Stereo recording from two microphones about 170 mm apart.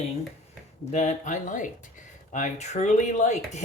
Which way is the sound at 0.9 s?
40° left (ahead or behind).